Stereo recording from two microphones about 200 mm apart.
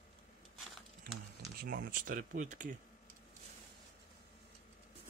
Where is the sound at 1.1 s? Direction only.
50° right (ahead or behind).